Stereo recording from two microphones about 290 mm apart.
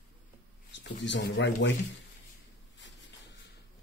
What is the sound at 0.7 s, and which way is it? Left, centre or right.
Speech, left.